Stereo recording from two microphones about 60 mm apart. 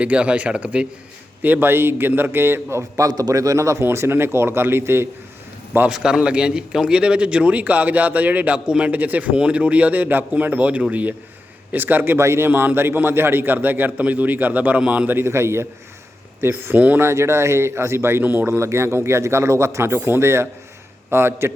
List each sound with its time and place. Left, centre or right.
0.0 s speech: right
1.4 s a man's voice: right
2.9 s a man's voice: right
3.8 s speech: right
5.9 s a man's voice: centre; by 12.2 s right
12.2 s speech: right
12.5 s a man's voice: right
15.1 s a man's voice: right
16.7 s speech: right
17.0 s speech: right
18.2 s speech: right
18.4 s speech: right